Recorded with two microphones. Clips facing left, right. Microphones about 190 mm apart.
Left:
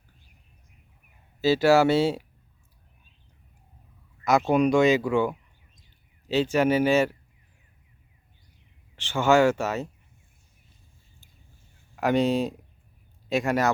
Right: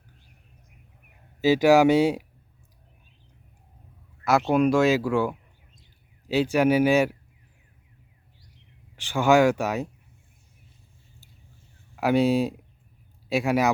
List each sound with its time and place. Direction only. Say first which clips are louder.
1.4 s speech: right 2 dB; 15° right (ahead or behind)
4.2 s a sound: even; 5° right (ahead or behind)
4.4 s speech: even; 5° right (ahead or behind)
9.0 s speech: right 1 dB; 15° right (ahead or behind)
11.9 s a man's voice: right 2 dB; 10° right (ahead or behind)